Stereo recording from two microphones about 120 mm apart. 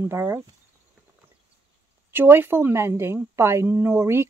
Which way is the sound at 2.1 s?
15° right (ahead or behind).